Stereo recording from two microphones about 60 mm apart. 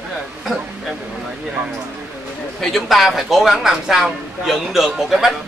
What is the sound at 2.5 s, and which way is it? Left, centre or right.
Speech, centre.